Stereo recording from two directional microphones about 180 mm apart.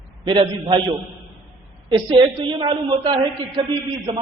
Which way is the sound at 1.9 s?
30° right (ahead or behind).